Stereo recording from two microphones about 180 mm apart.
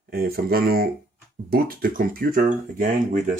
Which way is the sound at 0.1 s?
60° right (ahead or behind).